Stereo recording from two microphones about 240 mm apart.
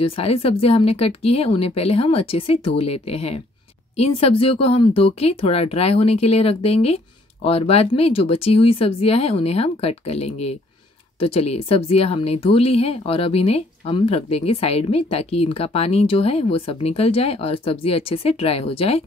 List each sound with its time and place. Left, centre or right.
0.0 s a woman's voice: left